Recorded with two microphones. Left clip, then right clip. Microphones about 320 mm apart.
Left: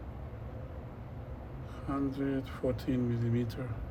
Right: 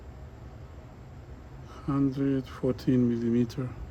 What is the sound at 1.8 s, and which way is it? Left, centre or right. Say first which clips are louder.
Speech: right 6 dB; right.